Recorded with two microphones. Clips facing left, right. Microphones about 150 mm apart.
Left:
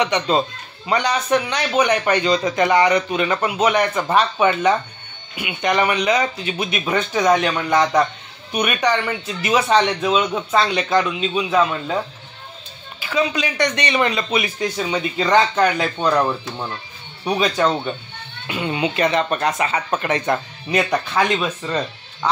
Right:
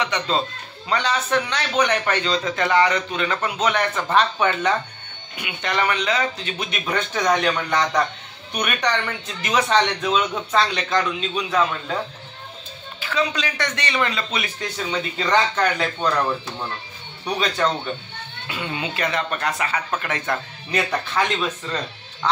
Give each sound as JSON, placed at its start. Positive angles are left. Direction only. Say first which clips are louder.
{"t": 0.0, "sound": "speech", "louder": "left 5 dB", "side_deg": 15}
{"t": 13.0, "sound": "speech", "louder": "left 3 dB", "side_deg": 10}
{"t": 18.5, "sound": "speech", "louder": "left 6 dB", "side_deg": 20}